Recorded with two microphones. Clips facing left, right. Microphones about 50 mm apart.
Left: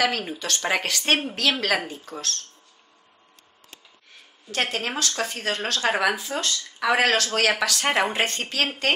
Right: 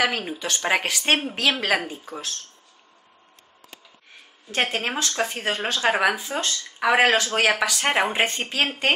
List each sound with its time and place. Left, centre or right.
0.0 s speech: centre
4.5 s speech: right